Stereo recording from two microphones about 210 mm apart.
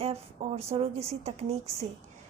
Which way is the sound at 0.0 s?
30° right (ahead or behind).